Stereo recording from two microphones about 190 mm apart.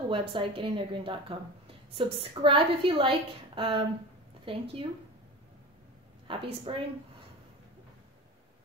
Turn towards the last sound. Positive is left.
turn(degrees=-30)  # may be behind; listen again after turning